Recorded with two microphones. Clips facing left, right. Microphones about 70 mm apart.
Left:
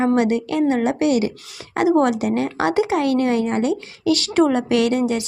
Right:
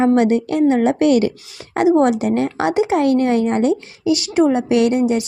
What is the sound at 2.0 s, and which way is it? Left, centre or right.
A woman's voice, right.